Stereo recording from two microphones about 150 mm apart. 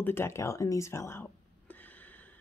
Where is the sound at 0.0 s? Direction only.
15° left (ahead or behind).